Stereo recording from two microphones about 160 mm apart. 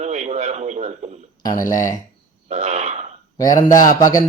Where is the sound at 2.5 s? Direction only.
45° right (ahead or behind).